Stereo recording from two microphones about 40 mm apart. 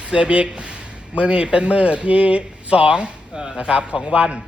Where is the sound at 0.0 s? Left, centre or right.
Right.